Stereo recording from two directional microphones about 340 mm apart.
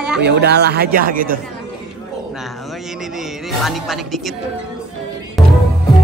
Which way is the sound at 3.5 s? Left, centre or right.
Centre.